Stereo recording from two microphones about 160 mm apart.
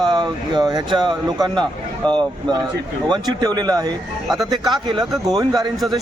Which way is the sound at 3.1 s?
25° right (ahead or behind).